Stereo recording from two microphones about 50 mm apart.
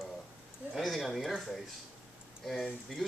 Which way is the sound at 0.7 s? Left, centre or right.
Centre.